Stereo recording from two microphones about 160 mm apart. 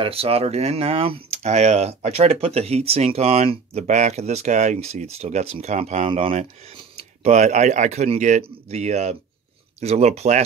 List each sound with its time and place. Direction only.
0.0 s speech: 35° right (ahead or behind)
6.0 s speech: 35° right (ahead or behind)